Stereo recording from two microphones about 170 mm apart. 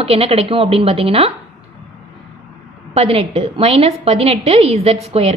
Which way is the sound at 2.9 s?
35° right (ahead or behind).